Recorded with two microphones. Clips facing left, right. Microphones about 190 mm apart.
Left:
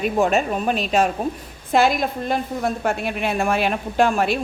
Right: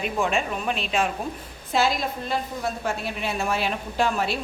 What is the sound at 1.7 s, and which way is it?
A woman's voice, 55° left (ahead or behind).